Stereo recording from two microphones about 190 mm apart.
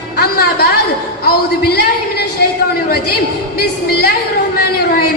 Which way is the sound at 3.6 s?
60° left (ahead or behind).